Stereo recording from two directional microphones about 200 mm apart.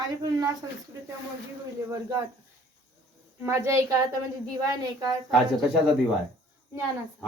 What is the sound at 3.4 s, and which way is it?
Speech, 15° right (ahead or behind).